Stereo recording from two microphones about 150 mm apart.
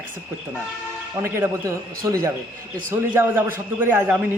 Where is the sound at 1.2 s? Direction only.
15° right (ahead or behind).